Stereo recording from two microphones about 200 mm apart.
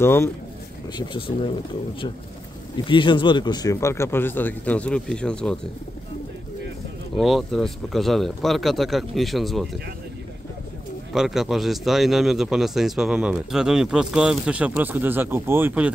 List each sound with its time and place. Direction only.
0.0 s speech: 10° left (ahead or behind)
0.9 s speech: 25° left (ahead or behind)
2.8 s speech: 25° left (ahead or behind); by 5.6 s 5° left (ahead or behind)
7.2 s a man's voice: centre (ahead or behind)
11.1 s a man's voice: centre (ahead or behind)